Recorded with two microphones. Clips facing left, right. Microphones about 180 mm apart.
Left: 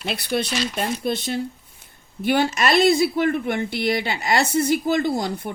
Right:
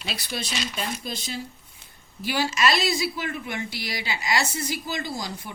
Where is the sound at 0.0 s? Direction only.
55° left (ahead or behind).